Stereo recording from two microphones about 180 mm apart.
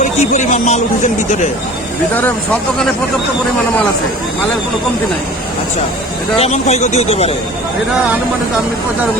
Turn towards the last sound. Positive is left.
turn(degrees=35)  # may be behind; listen again after turning